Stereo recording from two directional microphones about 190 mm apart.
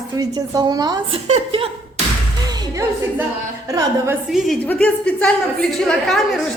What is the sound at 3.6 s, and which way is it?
Speech, 15° right (ahead or behind).